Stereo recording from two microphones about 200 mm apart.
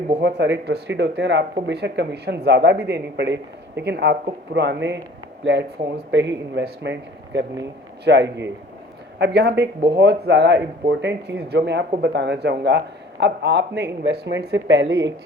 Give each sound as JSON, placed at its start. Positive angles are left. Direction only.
{"t": 0.2, "sound": "speech", "side_deg": -60}